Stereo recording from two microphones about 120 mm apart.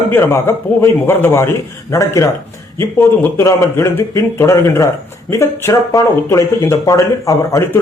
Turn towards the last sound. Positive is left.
turn(degrees=25)  # may be behind; listen again after turning